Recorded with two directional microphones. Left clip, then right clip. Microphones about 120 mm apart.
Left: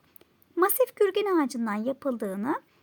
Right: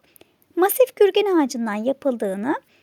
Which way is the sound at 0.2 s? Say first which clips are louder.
Right 5 dB; 35° right (ahead or behind).